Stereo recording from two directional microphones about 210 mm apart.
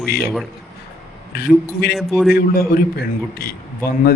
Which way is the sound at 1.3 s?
45° left (ahead or behind).